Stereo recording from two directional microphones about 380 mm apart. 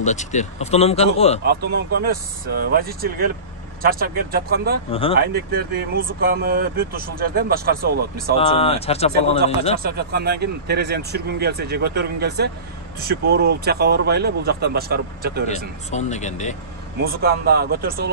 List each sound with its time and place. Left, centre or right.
0.0 s speech: centre
1.4 s speech: right
4.9 s speech: centre
5.2 s speech: right
8.4 s speech: centre
9.8 s speech: right
15.4 s speech: centre
17.0 s speech: right